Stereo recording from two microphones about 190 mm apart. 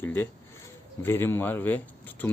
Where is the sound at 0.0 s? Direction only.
10° left (ahead or behind).